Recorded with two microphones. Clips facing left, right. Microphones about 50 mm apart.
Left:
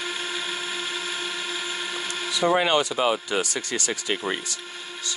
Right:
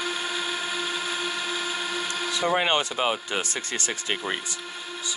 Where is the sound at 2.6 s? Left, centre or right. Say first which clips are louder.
Left 2 dB; right.